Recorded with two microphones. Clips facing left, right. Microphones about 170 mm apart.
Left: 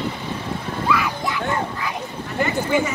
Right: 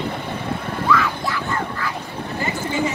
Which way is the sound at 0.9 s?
15° left (ahead or behind).